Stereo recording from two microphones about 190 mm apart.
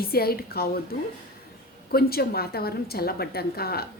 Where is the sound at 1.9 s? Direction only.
55° left (ahead or behind).